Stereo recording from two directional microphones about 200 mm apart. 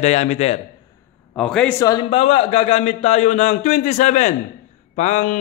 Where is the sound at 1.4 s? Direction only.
5° left (ahead or behind); by 5.4 s 35° left (ahead or behind).